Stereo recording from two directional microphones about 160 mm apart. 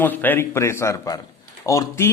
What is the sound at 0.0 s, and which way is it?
A man's voice, 10° left (ahead or behind).